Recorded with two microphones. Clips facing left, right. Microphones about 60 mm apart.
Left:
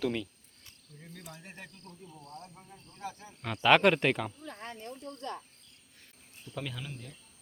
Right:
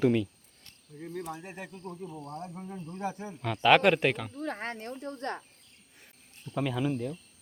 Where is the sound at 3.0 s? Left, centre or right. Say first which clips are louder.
Right 6 dB; right.